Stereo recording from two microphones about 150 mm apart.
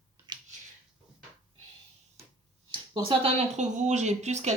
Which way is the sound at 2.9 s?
35° right (ahead or behind).